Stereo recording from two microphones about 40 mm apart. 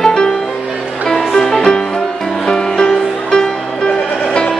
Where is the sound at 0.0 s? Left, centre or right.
Centre.